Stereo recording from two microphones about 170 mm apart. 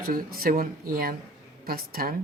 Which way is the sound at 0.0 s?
60° right (ahead or behind).